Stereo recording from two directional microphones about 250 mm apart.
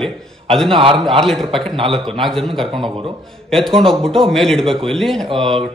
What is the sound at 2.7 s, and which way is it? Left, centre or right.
Speech, right.